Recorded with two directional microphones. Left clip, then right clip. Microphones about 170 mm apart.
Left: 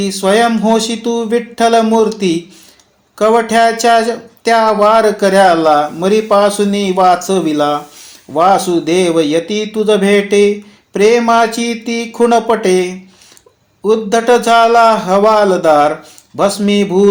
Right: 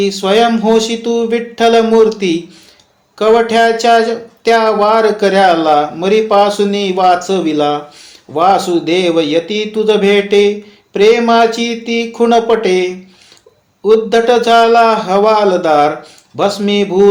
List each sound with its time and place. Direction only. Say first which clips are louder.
0.0 s speech: right 1 dB; 45° left (ahead or behind)